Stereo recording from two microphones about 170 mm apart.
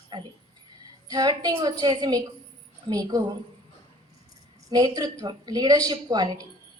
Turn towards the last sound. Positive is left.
turn(degrees=-25)  # may be behind; listen again after turning